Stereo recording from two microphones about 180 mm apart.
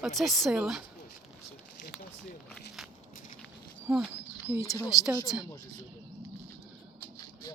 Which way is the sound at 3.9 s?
5° right (ahead or behind).